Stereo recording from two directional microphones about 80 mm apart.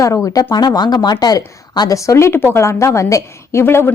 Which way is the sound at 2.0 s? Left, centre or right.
Left.